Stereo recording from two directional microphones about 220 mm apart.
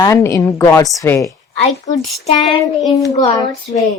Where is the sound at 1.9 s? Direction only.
35° left (ahead or behind).